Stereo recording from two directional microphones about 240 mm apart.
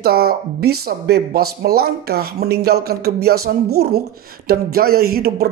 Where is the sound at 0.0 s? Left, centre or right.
Right.